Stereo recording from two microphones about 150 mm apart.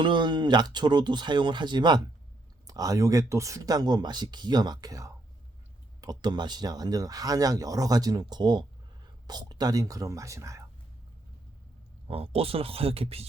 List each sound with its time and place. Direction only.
0.0 s speech: 30° right (ahead or behind)
12.0 s speech: 40° right (ahead or behind)